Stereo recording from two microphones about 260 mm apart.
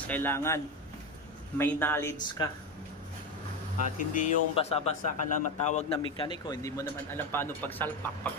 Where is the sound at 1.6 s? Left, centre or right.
Centre.